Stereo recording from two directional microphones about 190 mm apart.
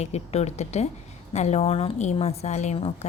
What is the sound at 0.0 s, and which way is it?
A woman's voice, 35° left (ahead or behind).